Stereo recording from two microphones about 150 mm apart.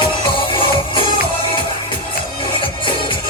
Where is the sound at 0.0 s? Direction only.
35° left (ahead or behind).